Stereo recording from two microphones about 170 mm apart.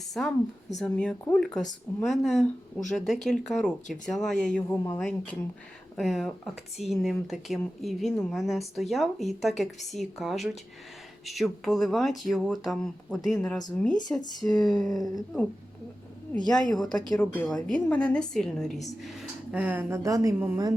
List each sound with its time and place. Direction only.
0.1 s speech: 5° left (ahead or behind)
16.5 s a woman's voice: 5° left (ahead or behind); by 20.7 s 20° right (ahead or behind)